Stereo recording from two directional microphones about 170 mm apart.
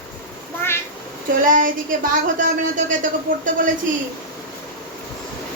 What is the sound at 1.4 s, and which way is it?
A woman's voice, 50° right (ahead or behind).